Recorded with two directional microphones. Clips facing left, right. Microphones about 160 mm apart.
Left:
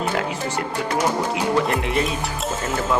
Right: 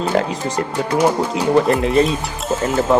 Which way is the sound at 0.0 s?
30° right (ahead or behind).